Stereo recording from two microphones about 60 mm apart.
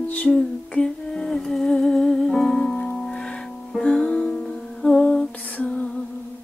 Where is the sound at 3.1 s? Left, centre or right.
Centre.